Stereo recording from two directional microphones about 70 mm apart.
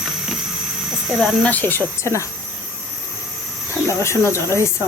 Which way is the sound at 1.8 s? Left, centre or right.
Right.